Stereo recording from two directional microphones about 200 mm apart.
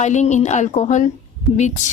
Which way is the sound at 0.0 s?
35° left (ahead or behind).